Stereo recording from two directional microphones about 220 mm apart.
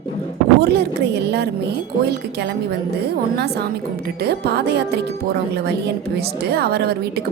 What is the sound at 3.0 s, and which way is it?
Speech, 45° right (ahead or behind).